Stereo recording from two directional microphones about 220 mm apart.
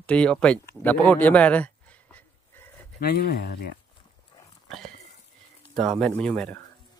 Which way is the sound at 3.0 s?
45° left (ahead or behind).